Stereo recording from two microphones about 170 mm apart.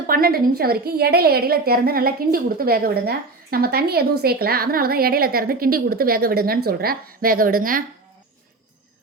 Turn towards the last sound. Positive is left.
turn(degrees=-55)  # may be behind; listen again after turning